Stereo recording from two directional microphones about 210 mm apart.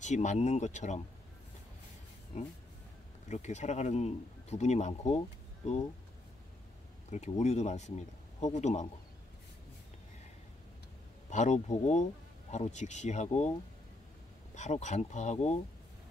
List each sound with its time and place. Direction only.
0.0 s speech: 35° left (ahead or behind)
3.3 s speech: 35° left (ahead or behind)
7.1 s speech: 35° left (ahead or behind)
11.2 s speech: 35° left (ahead or behind)
14.5 s speech: 35° left (ahead or behind)